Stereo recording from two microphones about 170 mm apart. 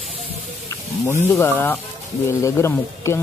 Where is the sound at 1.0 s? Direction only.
15° left (ahead or behind).